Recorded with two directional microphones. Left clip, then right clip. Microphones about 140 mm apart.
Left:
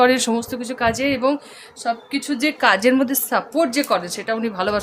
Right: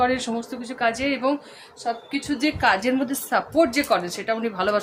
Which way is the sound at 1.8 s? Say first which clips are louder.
Left 4 dB; 90° left.